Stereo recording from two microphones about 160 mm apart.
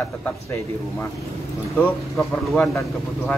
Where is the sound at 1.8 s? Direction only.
Centre (ahead or behind).